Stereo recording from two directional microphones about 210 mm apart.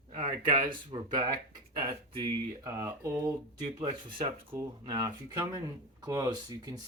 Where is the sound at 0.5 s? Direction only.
40° right (ahead or behind).